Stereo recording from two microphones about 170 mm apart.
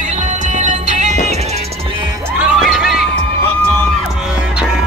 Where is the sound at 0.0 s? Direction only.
45° right (ahead or behind).